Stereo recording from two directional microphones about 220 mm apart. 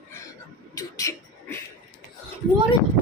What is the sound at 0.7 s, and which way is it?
Beatboxing, 15° left (ahead or behind).